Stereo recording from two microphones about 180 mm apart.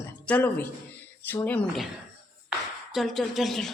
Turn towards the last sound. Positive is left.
turn(degrees=0)  # may be behind; listen again after turning